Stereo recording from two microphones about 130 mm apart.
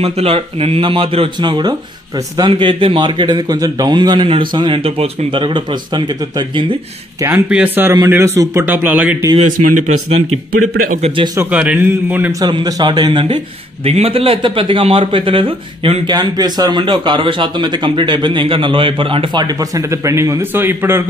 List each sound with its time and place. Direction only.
0.0 s a man's voice: 50° right (ahead or behind)
7.2 s a man's voice: 15° right (ahead or behind)
9.4 s speech: 75° right (ahead or behind)
11.0 s speech: 45° right (ahead or behind)
11.3 s a man's voice: 10° right (ahead or behind)
12.3 s a man's voice: 30° right (ahead or behind)